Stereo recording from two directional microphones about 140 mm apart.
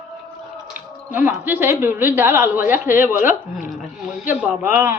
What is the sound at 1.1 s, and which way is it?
A woman's voice, 15° right (ahead or behind).